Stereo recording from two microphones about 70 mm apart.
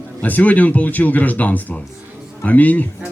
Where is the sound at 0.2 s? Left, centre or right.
Left.